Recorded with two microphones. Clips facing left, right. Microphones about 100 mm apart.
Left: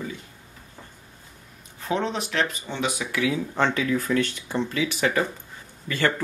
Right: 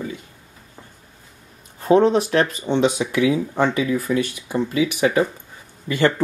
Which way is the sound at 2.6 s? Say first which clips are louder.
Right 10 dB; 25° right (ahead or behind).